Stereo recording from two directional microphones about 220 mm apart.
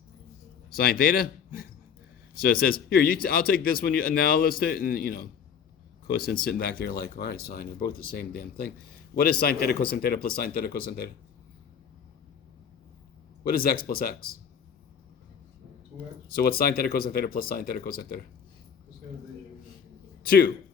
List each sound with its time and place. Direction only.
0.8 s speech: 40° left (ahead or behind)
6.1 s speech: 40° left (ahead or behind)
13.4 s speech: 45° left (ahead or behind)
16.3 s speech: 45° left (ahead or behind)
20.2 s speech: 40° left (ahead or behind)